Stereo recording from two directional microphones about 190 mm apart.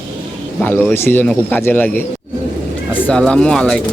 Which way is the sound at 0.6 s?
10° left (ahead or behind).